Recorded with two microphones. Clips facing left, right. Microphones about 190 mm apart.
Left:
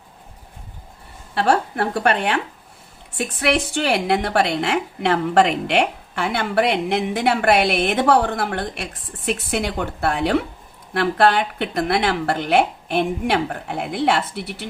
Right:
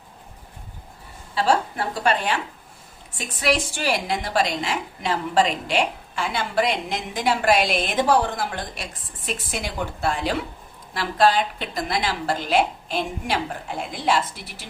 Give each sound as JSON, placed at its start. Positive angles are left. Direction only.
{"t": 1.4, "sound": "a woman's voice", "side_deg": 60}